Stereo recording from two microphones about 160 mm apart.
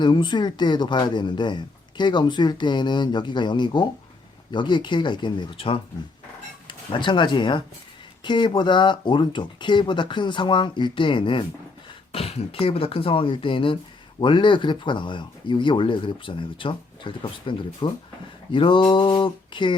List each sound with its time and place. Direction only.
0.0 s speech: 30° left (ahead or behind)